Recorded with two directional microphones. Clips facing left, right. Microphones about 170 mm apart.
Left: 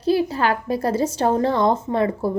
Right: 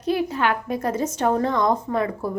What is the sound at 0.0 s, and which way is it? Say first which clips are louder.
A woman's voice: left 3 dB; 30° left (ahead or behind).